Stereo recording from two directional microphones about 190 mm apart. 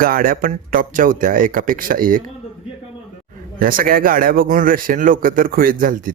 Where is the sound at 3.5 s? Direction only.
50° right (ahead or behind).